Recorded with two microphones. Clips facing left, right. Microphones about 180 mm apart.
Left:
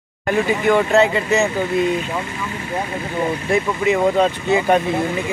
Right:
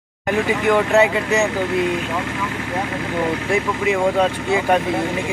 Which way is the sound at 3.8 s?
Centre (ahead or behind).